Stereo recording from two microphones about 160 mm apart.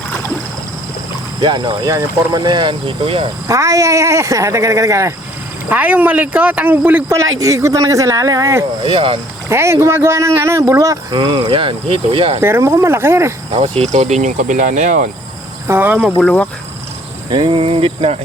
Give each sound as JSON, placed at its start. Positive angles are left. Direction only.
{"t": 1.4, "sound": "speech", "side_deg": -30}
{"t": 3.4, "sound": "speech", "side_deg": -20}
{"t": 8.8, "sound": "speech", "side_deg": -35}
{"t": 9.5, "sound": "speech", "side_deg": -15}
{"t": 11.2, "sound": "speech", "side_deg": -35}
{"t": 12.4, "sound": "speech", "side_deg": -15}
{"t": 13.5, "sound": "speech", "side_deg": -35}
{"t": 15.6, "sound": "speech", "side_deg": -15}
{"t": 16.1, "sound": "speech", "side_deg": 10}
{"t": 17.3, "sound": "speech", "side_deg": -35}